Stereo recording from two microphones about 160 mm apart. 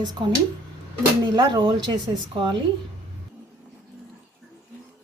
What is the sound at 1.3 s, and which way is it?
Speech, 25° right (ahead or behind).